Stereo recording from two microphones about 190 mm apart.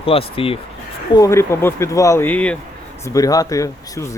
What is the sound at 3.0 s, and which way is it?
Speech, 15° left (ahead or behind).